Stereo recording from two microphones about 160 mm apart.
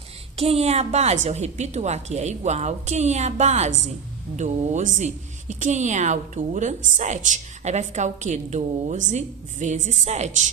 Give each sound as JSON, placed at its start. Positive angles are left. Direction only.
{"t": 0.3, "sound": "a woman's voice", "side_deg": -40}